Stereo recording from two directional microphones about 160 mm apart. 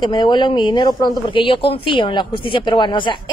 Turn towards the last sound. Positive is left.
turn(degrees=30)  # may be behind; listen again after turning